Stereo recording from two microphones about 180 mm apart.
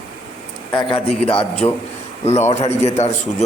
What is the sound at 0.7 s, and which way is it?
Speech, 25° left (ahead or behind).